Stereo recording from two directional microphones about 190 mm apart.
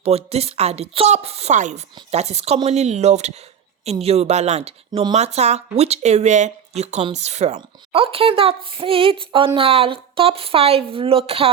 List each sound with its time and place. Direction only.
0.0 s speech: 30° right (ahead or behind)
4.9 s speech: 20° right (ahead or behind)
5.1 s speech: 35° right (ahead or behind)